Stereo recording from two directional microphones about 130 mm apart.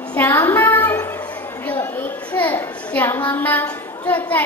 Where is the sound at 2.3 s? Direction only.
15° left (ahead or behind).